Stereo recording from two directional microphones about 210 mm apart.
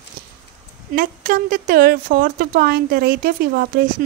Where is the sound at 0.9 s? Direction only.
40° right (ahead or behind).